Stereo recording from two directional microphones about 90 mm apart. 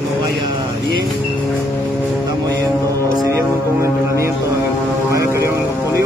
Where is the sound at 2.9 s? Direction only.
40° right (ahead or behind).